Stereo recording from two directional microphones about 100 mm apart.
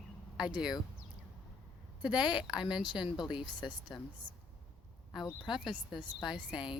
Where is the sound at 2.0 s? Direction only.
45° left (ahead or behind).